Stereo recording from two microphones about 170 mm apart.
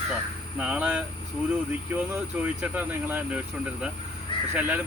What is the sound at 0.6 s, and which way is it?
Speech, 5° right (ahead or behind).